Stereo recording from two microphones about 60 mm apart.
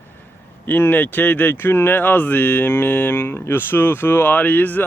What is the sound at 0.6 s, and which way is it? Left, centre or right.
Speech, left.